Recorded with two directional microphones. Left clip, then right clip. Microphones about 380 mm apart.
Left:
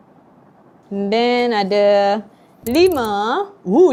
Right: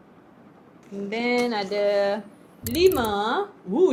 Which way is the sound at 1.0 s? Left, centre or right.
Left.